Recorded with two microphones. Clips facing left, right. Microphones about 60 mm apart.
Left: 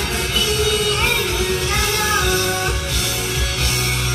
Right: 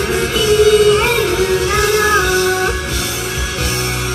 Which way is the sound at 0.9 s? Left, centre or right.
Right.